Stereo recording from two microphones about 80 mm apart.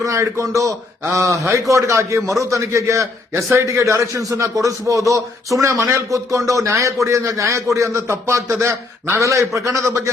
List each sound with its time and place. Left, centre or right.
0.0 s a man's voice: right